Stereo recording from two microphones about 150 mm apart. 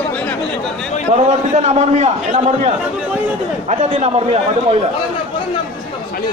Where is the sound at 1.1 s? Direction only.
50° right (ahead or behind).